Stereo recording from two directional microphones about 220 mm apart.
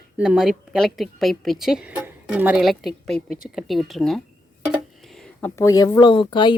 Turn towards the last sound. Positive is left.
turn(degrees=20)  # may be behind; listen again after turning